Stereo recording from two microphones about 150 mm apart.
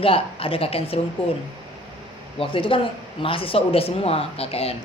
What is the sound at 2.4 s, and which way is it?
A man's voice, 35° left (ahead or behind).